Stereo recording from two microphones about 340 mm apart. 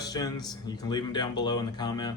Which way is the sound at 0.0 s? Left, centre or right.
Centre.